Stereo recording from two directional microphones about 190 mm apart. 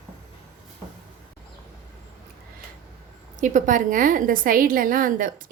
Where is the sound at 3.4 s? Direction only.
40° right (ahead or behind).